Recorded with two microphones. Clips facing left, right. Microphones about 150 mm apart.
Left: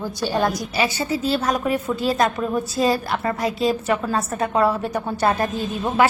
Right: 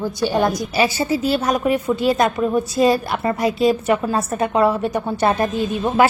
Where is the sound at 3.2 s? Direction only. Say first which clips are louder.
Right 5 dB; 15° right (ahead or behind).